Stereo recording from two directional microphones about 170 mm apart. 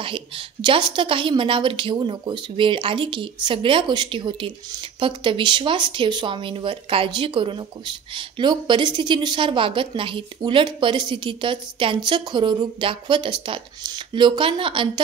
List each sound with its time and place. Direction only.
0.0 s a woman's voice: 30° right (ahead or behind)